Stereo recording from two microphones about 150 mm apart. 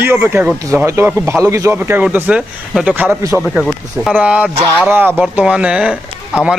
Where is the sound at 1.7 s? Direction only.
10° right (ahead or behind).